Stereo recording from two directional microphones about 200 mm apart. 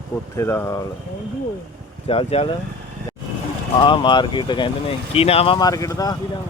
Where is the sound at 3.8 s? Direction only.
25° left (ahead or behind).